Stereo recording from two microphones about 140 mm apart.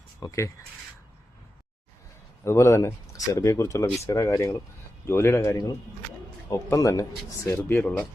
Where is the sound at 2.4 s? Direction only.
20° left (ahead or behind).